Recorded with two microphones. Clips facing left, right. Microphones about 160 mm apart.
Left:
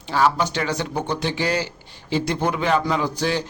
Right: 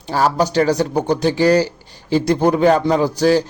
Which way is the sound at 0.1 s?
40° right (ahead or behind).